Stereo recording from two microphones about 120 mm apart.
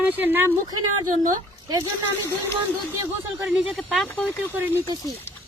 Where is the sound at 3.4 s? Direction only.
5° right (ahead or behind).